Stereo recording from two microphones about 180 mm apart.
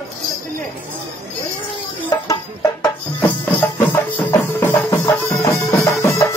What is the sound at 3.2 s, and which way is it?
Music, 10° left (ahead or behind).